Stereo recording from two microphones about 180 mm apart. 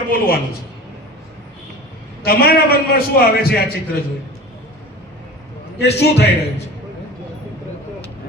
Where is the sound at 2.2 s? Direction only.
60° left (ahead or behind).